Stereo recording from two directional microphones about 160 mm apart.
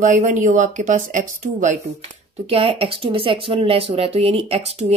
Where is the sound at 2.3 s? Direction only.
40° right (ahead or behind).